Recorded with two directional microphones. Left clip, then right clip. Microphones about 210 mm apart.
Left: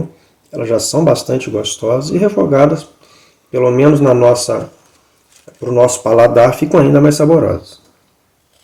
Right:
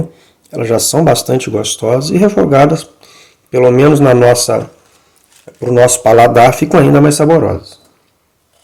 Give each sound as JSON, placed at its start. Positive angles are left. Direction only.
{"t": 0.5, "sound": "speech", "side_deg": -30}
{"t": 5.5, "sound": "speech", "side_deg": -35}